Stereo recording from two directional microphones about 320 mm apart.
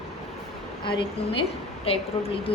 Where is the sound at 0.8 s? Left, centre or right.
Centre.